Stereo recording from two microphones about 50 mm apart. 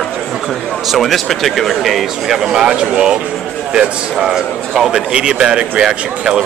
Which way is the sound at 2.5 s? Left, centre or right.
Centre.